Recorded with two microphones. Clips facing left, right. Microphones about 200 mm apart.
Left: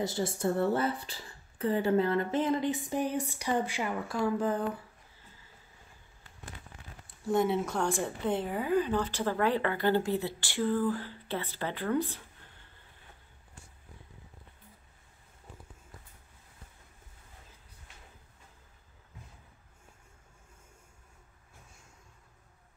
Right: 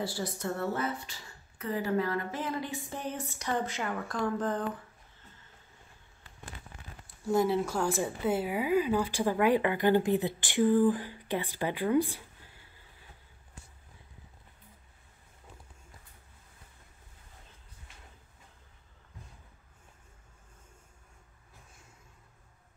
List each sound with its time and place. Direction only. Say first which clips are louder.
0.0 s a woman's voice: left 4 dB; 25° left (ahead or behind); by 4.6 s 10° left (ahead or behind)
7.2 s speech: right 1 dB; centre (ahead or behind)